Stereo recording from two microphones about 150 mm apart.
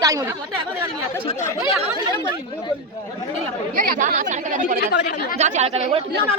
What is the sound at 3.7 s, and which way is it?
Speech, 65° right (ahead or behind).